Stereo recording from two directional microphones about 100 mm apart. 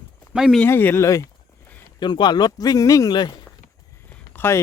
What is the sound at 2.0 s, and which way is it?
Speech, 50° left (ahead or behind).